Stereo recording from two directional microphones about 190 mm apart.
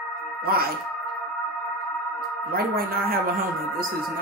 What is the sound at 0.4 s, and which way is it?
Speech, 55° right (ahead or behind).